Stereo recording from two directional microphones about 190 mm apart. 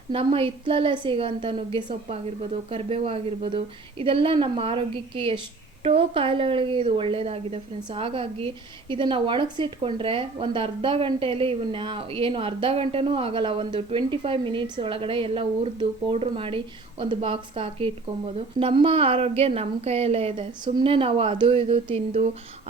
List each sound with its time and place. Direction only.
0.1 s a woman's voice: 30° right (ahead or behind)